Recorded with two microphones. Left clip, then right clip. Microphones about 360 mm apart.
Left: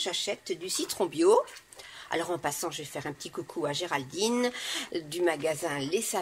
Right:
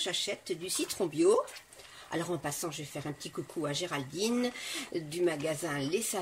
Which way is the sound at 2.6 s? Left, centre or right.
Centre.